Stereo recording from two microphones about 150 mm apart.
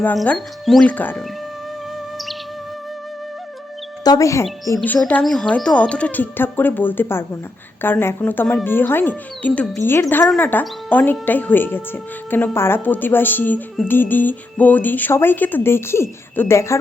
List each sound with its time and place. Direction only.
0.2 s speech: centre (ahead or behind)
4.0 s speech: 25° left (ahead or behind)
4.8 s speech: 10° left (ahead or behind)